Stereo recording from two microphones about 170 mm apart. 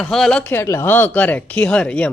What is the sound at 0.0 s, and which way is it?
Speech, 5° left (ahead or behind).